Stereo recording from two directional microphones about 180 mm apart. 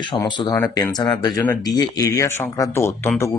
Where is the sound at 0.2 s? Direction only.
20° left (ahead or behind).